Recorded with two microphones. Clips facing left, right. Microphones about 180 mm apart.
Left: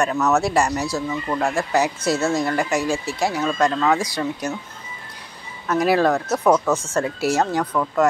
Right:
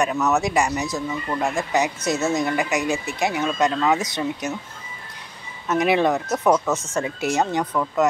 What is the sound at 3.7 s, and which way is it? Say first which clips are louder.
Speech: left 1 dB; 10° right (ahead or behind).